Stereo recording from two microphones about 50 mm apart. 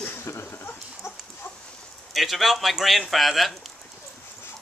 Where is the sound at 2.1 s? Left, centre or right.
Centre.